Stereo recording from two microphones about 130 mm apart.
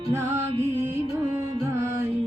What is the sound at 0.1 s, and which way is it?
Music, 20° right (ahead or behind).